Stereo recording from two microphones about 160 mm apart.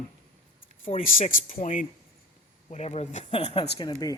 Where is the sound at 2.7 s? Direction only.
40° left (ahead or behind).